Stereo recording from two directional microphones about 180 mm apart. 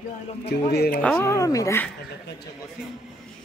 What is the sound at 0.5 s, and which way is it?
Speech, 65° left (ahead or behind).